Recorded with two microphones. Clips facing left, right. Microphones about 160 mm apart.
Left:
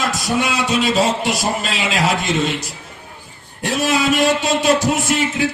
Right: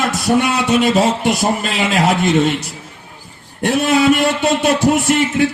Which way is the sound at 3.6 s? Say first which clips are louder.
Right 5 dB; 55° right (ahead or behind).